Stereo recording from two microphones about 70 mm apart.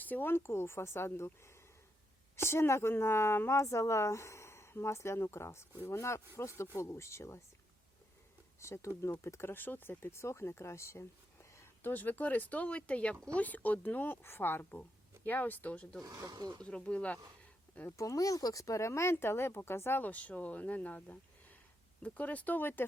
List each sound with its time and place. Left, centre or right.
0.0 s speech: left
8.6 s speech: left
11.8 s speech: left
16.0 s speech: right
16.6 s speech: centre
17.9 s speech: left